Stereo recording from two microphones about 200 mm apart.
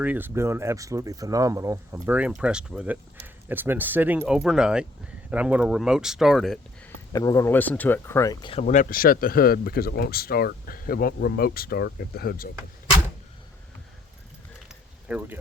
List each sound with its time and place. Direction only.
0.0 s speech: 10° right (ahead or behind)
7.1 s speech: 20° left (ahead or behind)
8.6 s speech: 40° left (ahead or behind)
14.7 s keys jangling: 5° right (ahead or behind)